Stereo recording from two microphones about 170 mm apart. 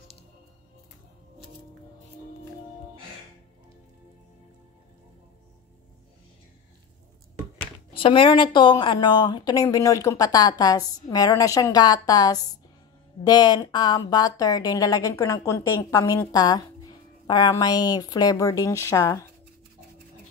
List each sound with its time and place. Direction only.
7.9 s a woman's voice: 30° left (ahead or behind)